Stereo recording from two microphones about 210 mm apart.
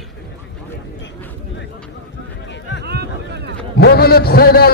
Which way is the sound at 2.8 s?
50° right (ahead or behind).